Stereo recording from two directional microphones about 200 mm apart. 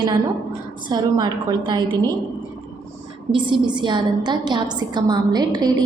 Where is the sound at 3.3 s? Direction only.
25° right (ahead or behind).